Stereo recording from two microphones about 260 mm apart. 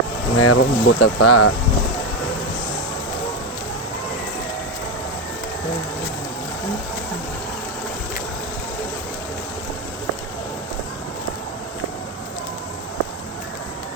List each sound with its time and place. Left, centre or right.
0.3 s speech: left